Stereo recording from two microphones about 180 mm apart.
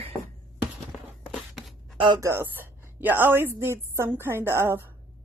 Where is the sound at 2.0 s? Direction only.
15° right (ahead or behind).